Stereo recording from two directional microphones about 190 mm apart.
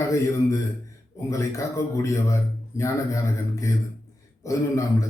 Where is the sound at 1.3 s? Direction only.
15° left (ahead or behind).